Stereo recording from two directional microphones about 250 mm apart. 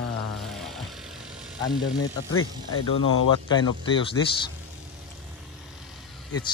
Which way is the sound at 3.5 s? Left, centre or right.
Centre.